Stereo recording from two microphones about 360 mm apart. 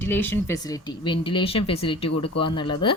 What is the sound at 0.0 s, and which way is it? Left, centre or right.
A woman's voice, centre.